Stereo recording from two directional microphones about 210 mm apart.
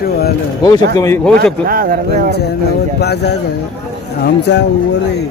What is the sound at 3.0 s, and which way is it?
Speech, 50° left (ahead or behind).